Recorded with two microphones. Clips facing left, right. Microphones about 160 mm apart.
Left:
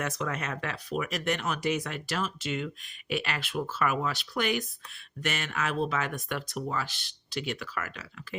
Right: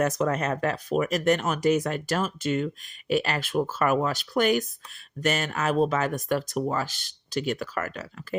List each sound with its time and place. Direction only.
0.0 s speech: 40° right (ahead or behind)